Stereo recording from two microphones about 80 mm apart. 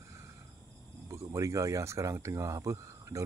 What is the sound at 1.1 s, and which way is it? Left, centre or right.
Speech, right.